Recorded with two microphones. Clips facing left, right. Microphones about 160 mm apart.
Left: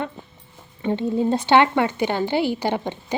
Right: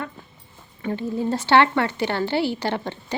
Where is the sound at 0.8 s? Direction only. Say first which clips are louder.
Left 4 dB; 25° left (ahead or behind).